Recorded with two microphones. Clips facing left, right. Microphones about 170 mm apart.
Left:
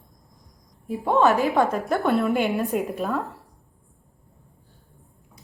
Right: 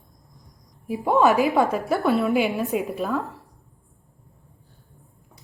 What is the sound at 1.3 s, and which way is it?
Speech, 40° left (ahead or behind).